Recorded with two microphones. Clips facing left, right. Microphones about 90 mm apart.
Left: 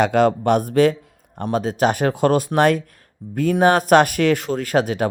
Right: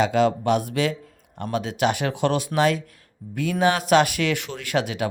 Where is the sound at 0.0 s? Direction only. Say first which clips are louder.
Left 4 dB; 50° left (ahead or behind).